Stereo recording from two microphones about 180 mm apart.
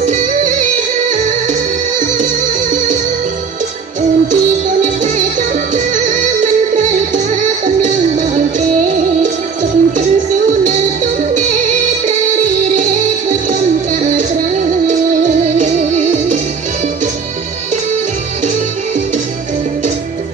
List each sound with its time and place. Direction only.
0.0 s music: 45° right (ahead or behind)
5.9 s music: 40° right (ahead or behind)
12.7 s music: 45° right (ahead or behind)
15.4 s music: 40° right (ahead or behind)